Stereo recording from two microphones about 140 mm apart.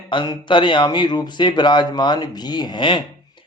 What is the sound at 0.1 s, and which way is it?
Speech, 35° left (ahead or behind).